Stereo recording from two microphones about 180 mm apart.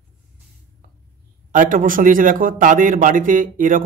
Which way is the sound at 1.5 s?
45° right (ahead or behind).